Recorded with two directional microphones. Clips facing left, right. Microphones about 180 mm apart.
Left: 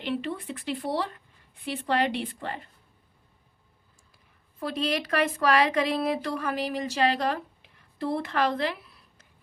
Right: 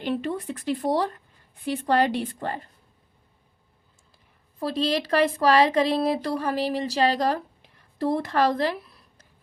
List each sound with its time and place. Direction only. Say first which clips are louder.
0.0 s speech: right 3 dB; 45° right (ahead or behind)
4.6 s a woman's voice: right 4 dB; 35° right (ahead or behind)